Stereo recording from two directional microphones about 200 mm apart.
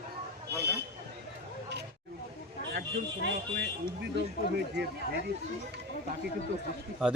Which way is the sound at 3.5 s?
55° right (ahead or behind).